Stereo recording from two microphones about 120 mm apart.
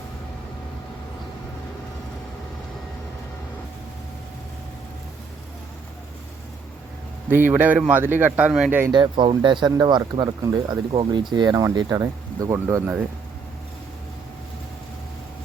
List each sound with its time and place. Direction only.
7.3 s a man's voice: 20° right (ahead or behind)
8.9 s speech: 40° right (ahead or behind)